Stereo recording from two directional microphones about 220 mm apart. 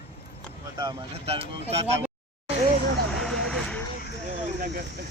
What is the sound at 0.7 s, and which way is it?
Speech, 25° right (ahead or behind).